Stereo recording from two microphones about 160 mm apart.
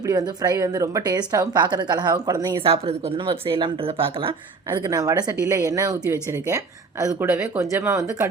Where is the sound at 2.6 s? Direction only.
40° right (ahead or behind).